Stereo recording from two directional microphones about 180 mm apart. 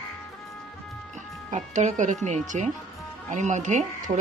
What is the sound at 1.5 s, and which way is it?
Speech, 40° right (ahead or behind).